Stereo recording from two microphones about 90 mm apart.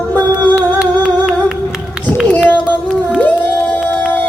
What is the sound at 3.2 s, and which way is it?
Crowd, 15° left (ahead or behind).